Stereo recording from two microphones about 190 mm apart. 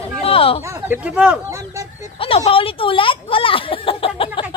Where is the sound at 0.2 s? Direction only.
30° left (ahead or behind).